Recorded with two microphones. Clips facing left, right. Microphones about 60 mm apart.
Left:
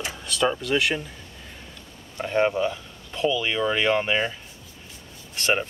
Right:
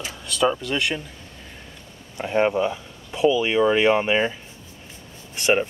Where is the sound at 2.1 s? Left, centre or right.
Centre.